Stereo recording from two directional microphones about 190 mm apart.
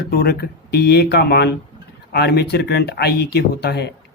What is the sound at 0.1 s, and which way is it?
Speech, 60° left (ahead or behind).